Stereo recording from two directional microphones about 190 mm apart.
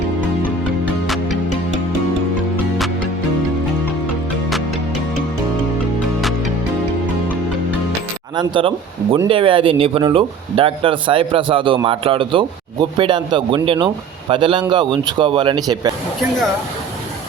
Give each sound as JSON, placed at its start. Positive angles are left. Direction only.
{"t": 1.0, "sound": "music", "side_deg": 0}
{"t": 8.4, "sound": "speech", "side_deg": -25}